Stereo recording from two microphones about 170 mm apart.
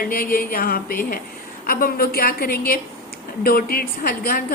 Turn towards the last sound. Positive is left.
turn(degrees=60)  # may be behind; listen again after turning